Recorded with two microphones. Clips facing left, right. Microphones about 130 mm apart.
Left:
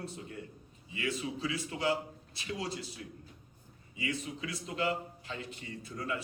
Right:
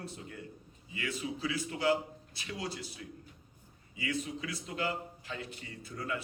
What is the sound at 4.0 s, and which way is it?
A man's voice, 30° left (ahead or behind).